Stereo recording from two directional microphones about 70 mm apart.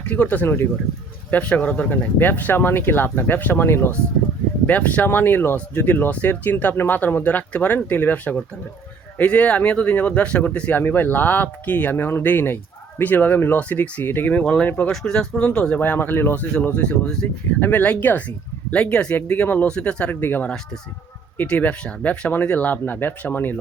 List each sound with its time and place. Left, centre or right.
0.0 s speech: left
1.3 s speech: centre
4.6 s speech: left
14.4 s speech: centre
15.8 s speech: left